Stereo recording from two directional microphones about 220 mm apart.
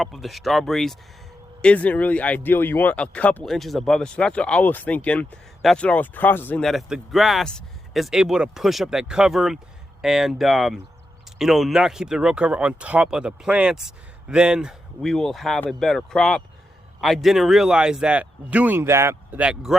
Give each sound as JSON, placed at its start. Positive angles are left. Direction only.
{"t": 0.0, "sound": "speech", "side_deg": 0}